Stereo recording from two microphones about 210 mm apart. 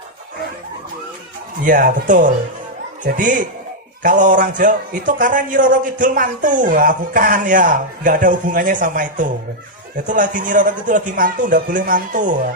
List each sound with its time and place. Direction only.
1.6 s a man's voice: 40° right (ahead or behind)